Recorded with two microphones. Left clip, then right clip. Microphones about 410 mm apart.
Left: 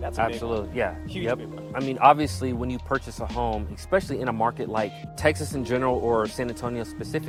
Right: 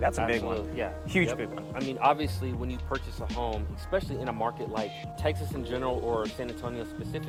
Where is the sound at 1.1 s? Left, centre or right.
Right.